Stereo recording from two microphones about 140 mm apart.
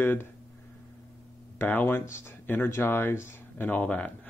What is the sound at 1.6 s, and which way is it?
Speech, 15° left (ahead or behind).